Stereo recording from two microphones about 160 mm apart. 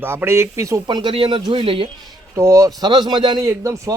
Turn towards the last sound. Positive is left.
turn(degrees=-20)  # may be behind; listen again after turning